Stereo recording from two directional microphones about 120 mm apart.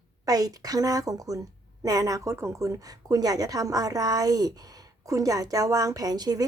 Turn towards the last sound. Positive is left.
turn(degrees=-35)  # may be behind; listen again after turning